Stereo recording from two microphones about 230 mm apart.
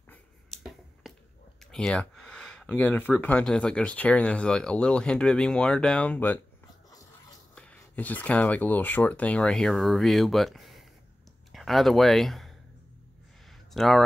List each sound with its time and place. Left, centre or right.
0.1 s finger snapping: centre
1.6 s speech: centre
7.5 s speech: centre
13.5 s a sound: centre